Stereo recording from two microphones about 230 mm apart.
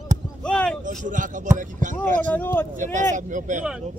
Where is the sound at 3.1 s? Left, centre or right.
Right.